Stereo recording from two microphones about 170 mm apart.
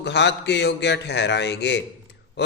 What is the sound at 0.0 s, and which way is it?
A man's voice, 90° left.